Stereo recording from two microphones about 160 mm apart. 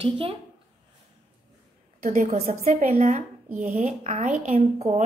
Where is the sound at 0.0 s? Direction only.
35° right (ahead or behind).